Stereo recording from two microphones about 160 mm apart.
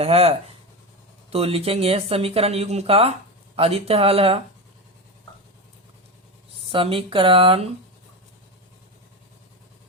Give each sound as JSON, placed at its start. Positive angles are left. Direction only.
{"t": 0.0, "sound": "speech", "side_deg": -40}
{"t": 6.7, "sound": "speech", "side_deg": -35}